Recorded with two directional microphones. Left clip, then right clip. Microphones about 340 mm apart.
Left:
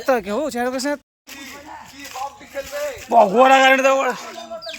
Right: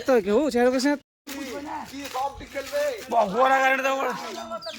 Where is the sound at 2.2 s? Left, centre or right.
Centre.